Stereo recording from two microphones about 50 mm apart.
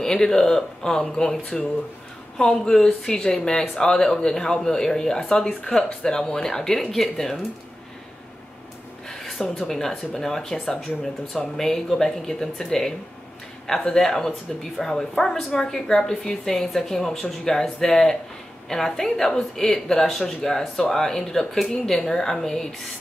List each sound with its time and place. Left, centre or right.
0.0 s a woman's voice: centre
9.1 s a sound: centre
9.7 s a woman's voice: centre